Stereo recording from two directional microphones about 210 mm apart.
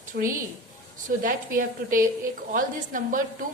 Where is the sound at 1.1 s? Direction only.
40° right (ahead or behind).